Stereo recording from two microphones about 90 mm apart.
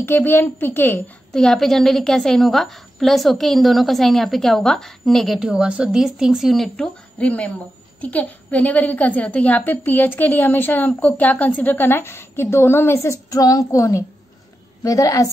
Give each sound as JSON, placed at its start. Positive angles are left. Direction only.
{"t": 0.0, "sound": "a woman's voice", "side_deg": 25}
{"t": 1.3, "sound": "a woman's voice", "side_deg": 5}
{"t": 7.2, "sound": "a woman's voice", "side_deg": 15}